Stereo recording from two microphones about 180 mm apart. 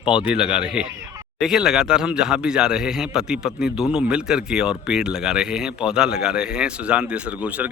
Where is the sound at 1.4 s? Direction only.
Centre (ahead or behind).